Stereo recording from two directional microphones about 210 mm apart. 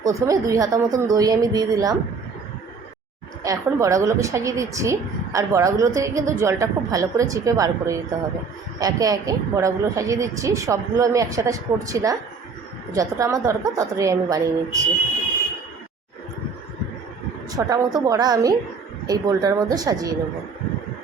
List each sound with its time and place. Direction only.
0.0 s speech: 15° right (ahead or behind)
3.4 s speech: 15° right (ahead or behind)
17.5 s speech: 15° right (ahead or behind)